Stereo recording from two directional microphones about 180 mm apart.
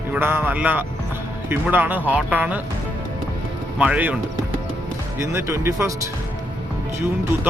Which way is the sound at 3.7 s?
5° right (ahead or behind).